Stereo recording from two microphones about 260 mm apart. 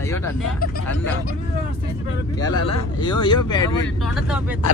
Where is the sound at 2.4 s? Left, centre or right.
Centre.